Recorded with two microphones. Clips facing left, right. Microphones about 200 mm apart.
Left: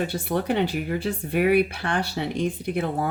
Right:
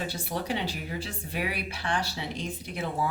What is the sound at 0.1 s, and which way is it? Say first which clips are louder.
Speech: left 7 dB; 55° left (ahead or behind).